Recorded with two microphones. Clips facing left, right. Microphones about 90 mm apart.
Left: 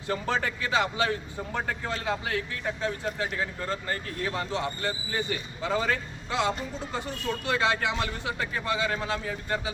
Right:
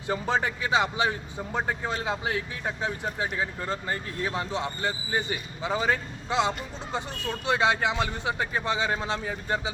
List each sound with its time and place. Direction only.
0.1 s speech: 20° right (ahead or behind)